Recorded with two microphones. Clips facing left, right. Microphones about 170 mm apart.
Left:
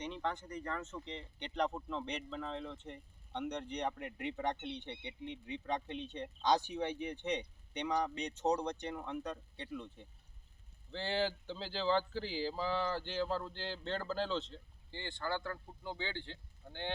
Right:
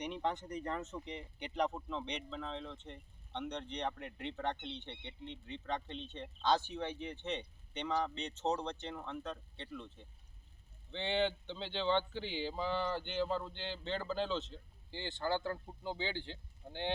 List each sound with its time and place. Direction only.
0.0 s speech: 15° right (ahead or behind); by 10.1 s 15° left (ahead or behind)
10.9 s speech: centre (ahead or behind)
14.9 s speech: 20° right (ahead or behind)